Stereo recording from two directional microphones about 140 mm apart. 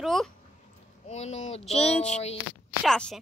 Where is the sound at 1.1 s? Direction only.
50° left (ahead or behind).